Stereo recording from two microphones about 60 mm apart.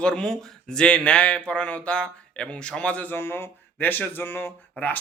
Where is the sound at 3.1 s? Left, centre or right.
Left.